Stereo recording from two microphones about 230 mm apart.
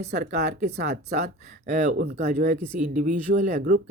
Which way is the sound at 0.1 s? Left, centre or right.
Right.